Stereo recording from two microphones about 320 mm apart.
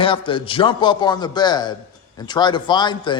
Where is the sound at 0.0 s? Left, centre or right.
Centre.